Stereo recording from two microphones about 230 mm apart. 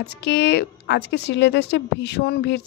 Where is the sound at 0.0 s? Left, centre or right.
Left.